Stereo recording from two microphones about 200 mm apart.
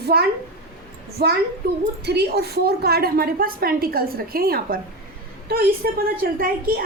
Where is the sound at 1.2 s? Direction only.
50° right (ahead or behind).